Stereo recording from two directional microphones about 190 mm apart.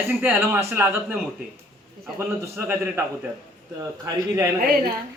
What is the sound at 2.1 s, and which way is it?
Speech, 10° right (ahead or behind).